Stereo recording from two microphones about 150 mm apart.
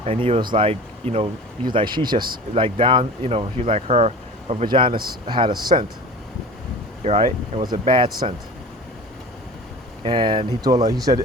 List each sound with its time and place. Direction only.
0.0 s speech: 40° right (ahead or behind)
7.0 s speech: 45° right (ahead or behind)
7.9 s speech: 30° right (ahead or behind)
10.0 s speech: 35° right (ahead or behind)